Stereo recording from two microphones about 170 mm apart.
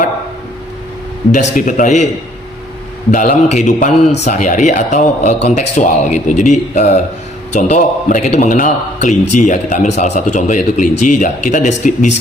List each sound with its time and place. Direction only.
1.3 s speech: 50° left (ahead or behind)
3.1 s speech: 50° left (ahead or behind)